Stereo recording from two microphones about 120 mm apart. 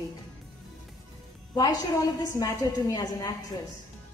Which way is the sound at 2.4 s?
30° left (ahead or behind).